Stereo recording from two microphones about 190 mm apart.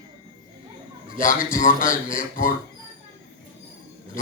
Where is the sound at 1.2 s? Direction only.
45° left (ahead or behind).